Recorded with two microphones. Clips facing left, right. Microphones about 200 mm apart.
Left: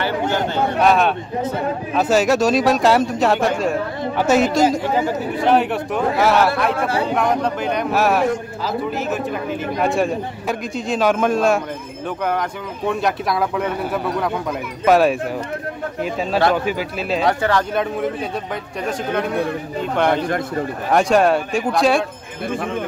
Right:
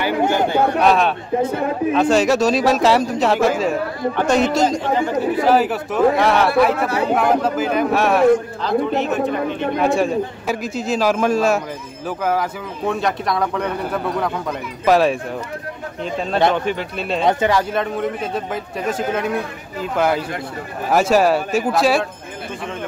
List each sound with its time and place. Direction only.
0.0 s speech: 10° right (ahead or behind)
0.8 s a man's voice: centre (ahead or behind)
17.3 s speech: 15° right (ahead or behind)
17.7 s a man's voice: centre (ahead or behind)